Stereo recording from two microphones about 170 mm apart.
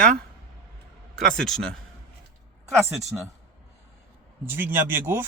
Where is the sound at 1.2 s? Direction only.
5° left (ahead or behind).